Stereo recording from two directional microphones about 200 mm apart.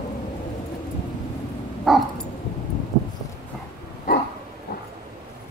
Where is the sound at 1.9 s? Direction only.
Centre (ahead or behind).